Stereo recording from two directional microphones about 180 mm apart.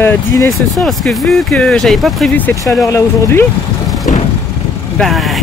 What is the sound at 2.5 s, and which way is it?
Speech, 15° left (ahead or behind).